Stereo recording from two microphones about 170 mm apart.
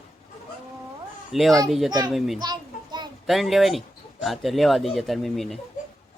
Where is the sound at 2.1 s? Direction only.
Centre (ahead or behind).